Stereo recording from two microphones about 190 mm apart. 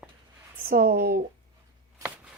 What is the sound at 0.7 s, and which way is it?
Speech, 50° right (ahead or behind).